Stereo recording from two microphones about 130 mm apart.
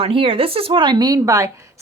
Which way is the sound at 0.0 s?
45° right (ahead or behind).